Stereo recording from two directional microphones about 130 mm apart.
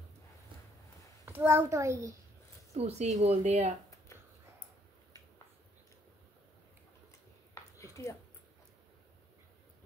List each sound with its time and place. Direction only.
1.2 s a child's voice: 20° right (ahead or behind)
2.7 s speech: 55° right (ahead or behind)
7.8 s a sound: 25° left (ahead or behind)